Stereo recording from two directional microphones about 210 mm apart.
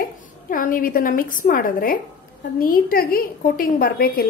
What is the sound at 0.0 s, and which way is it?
A woman's voice, 40° left (ahead or behind).